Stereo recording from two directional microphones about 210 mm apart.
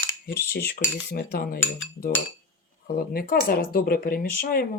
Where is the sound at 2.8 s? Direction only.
45° left (ahead or behind).